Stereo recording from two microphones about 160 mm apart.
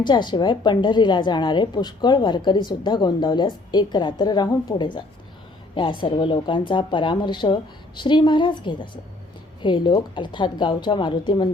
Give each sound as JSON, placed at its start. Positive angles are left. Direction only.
{"t": 0.0, "sound": "a woman's voice", "side_deg": 30}